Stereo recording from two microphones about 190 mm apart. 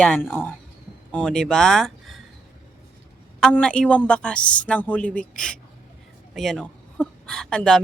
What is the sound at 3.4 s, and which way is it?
Speech, 5° left (ahead or behind).